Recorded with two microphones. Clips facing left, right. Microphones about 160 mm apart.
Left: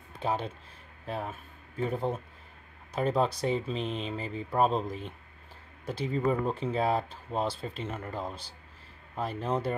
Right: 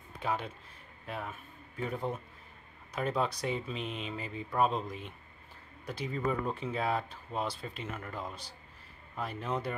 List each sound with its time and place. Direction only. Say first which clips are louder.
0.2 s speech: left 3 dB; 30° left (ahead or behind)